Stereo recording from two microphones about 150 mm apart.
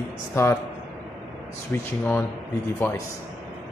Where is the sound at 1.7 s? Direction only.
10° left (ahead or behind).